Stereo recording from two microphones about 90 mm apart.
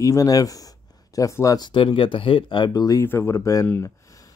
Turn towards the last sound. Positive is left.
turn(degrees=35)  # may be behind; listen again after turning